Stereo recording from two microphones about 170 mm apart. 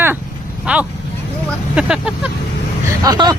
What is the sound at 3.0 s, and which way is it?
Speech, 20° right (ahead or behind).